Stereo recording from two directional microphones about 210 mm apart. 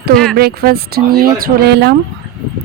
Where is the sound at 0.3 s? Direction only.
45° right (ahead or behind).